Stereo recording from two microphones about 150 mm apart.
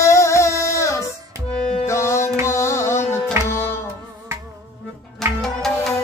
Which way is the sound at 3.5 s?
15° left (ahead or behind).